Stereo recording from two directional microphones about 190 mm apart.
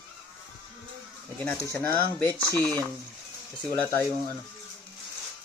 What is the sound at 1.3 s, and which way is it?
Speech, 10° left (ahead or behind).